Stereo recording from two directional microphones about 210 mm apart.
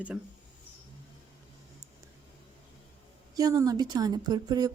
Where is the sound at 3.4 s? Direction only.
15° right (ahead or behind).